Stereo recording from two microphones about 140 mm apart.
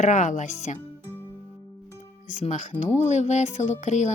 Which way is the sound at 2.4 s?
60° left (ahead or behind).